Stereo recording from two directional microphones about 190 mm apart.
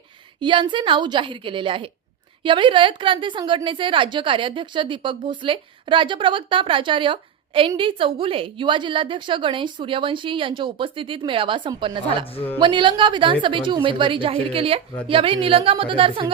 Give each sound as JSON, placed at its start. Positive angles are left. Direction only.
{"t": 0.3, "sound": "a woman's voice", "side_deg": -25}